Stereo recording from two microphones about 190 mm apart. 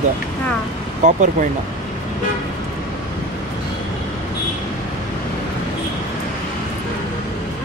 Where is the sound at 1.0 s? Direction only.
40° right (ahead or behind).